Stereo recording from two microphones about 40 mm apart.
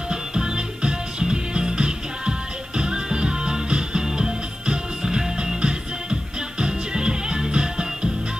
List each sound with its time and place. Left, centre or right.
0.1 s music: centre